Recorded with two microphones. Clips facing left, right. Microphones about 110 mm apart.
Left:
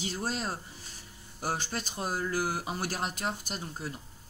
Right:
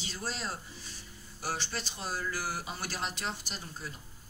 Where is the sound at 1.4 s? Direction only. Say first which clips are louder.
Left 3 dB; 50° left (ahead or behind).